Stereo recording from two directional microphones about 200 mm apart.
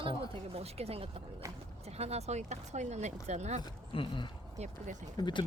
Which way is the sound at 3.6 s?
25° left (ahead or behind).